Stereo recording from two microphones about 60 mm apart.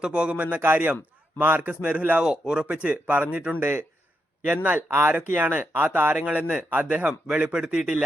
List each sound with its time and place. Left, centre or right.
0.0 s speech: centre
0.6 s speech: right
6.2 s a man's voice: centre